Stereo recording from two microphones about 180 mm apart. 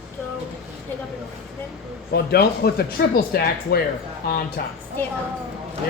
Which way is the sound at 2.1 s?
60° left (ahead or behind).